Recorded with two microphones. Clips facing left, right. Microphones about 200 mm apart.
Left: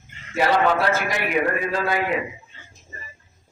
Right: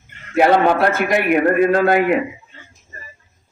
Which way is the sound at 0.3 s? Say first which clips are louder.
Right 6 dB; 55° right (ahead or behind).